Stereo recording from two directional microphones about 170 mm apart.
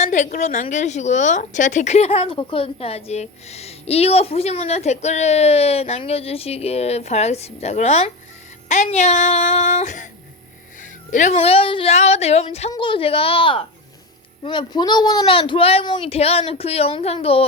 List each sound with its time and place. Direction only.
0.0 s a woman's voice: 45° left (ahead or behind)
8.7 s child singing: 45° left (ahead or behind)
10.8 s a woman's voice: 50° left (ahead or behind)